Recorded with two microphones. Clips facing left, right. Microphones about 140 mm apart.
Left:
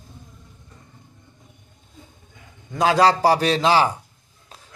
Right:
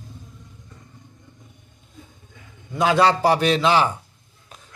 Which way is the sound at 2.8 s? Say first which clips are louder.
Left 1 dB; 35° left (ahead or behind).